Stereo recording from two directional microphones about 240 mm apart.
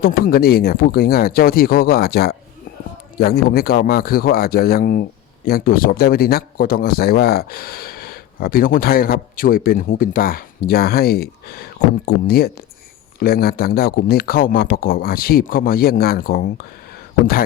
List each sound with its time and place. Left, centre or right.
0.0 s speech: left